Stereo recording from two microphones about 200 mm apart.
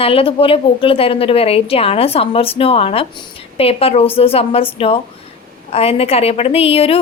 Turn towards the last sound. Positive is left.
turn(degrees=30)  # may be behind; listen again after turning